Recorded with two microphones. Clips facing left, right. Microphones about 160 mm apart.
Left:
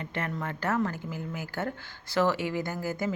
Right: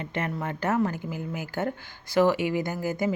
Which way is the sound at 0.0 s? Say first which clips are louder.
Right 3 dB; 20° right (ahead or behind).